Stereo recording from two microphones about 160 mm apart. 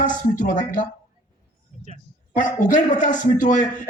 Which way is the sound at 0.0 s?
50° left (ahead or behind).